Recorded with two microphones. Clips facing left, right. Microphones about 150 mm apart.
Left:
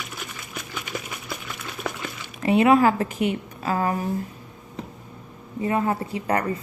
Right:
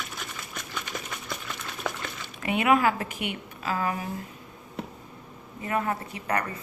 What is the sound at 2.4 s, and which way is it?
A woman's voice, 35° left (ahead or behind).